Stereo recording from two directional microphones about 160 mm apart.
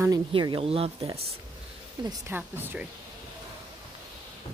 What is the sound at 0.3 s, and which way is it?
Speech, 30° right (ahead or behind).